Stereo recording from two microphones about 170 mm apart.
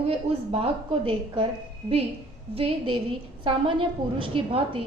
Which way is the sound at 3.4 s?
30° right (ahead or behind).